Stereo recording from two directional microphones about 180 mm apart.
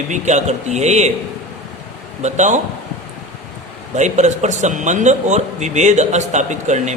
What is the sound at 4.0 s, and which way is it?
A man's voice, 40° right (ahead or behind).